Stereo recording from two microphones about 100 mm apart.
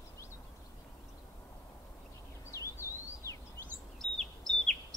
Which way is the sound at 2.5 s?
30° left (ahead or behind).